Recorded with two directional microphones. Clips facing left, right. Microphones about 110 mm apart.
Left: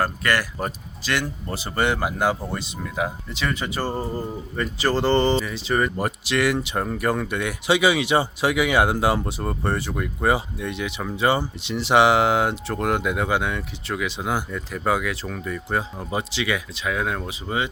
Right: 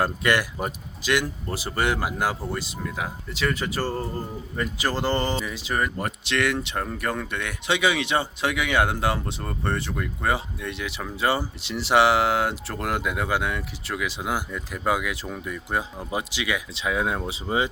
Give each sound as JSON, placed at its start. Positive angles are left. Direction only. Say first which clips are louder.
{"t": 0.0, "sound": "speech", "louder": "even", "side_deg": -15}
{"t": 4.5, "sound": "speech", "louder": "left 4 dB", "side_deg": -10}
{"t": 16.8, "sound": "speech", "louder": "right 2 dB", "side_deg": -20}